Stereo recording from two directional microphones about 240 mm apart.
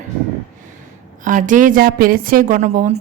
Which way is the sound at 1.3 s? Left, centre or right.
Right.